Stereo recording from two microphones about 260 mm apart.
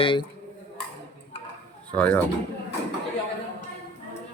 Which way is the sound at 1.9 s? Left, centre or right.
Centre.